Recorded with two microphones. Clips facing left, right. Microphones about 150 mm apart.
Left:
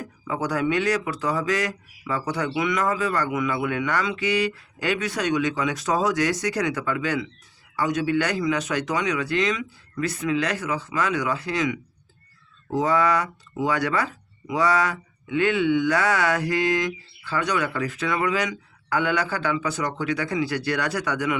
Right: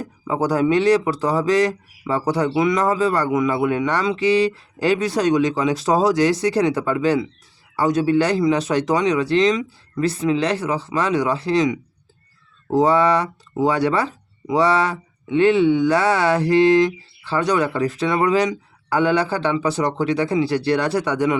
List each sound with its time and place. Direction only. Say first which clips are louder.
0.0 s speech: right 6 dB; 30° right (ahead or behind)